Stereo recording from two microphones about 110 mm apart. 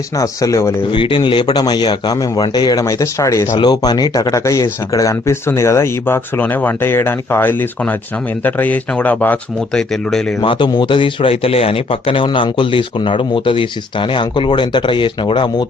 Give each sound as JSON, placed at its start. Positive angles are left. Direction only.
{"t": 0.2, "sound": "speech", "side_deg": 30}
{"t": 0.9, "sound": "speech", "side_deg": 50}
{"t": 3.6, "sound": "speech", "side_deg": 40}
{"t": 9.9, "sound": "speech", "side_deg": 5}
{"t": 10.4, "sound": "speech", "side_deg": 50}